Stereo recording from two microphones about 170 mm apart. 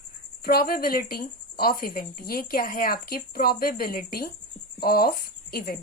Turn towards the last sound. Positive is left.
turn(degrees=60)  # may be behind; listen again after turning